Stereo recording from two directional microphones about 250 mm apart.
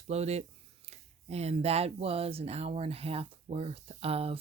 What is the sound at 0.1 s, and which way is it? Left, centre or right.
Speech, right.